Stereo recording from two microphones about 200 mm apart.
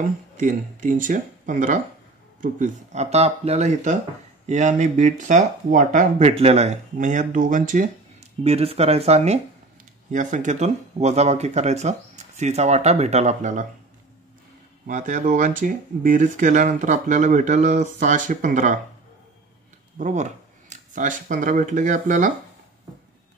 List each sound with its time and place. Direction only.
0.4 s speech: 40° right (ahead or behind)
14.9 s speech: 40° right (ahead or behind)
20.0 s speech: 35° right (ahead or behind)